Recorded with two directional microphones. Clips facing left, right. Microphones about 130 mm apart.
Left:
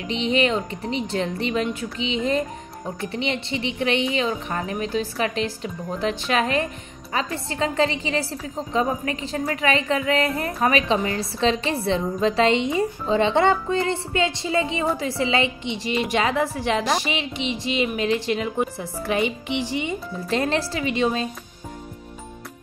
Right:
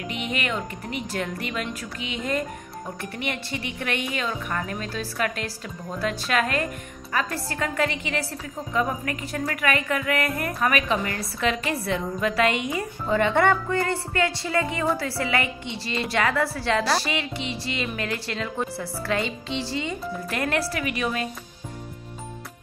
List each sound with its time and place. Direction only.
0.1 s a woman's voice: 25° left (ahead or behind)